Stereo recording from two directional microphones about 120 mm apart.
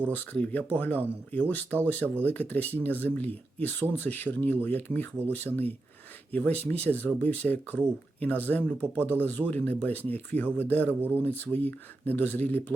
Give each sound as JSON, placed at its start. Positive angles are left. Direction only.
{"t": 0.1, "sound": "speech", "side_deg": 15}